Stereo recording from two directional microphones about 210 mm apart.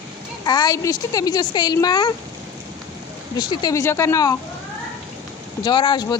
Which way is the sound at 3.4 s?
20° left (ahead or behind).